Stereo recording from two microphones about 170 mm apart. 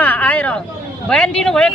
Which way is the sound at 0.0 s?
10° left (ahead or behind).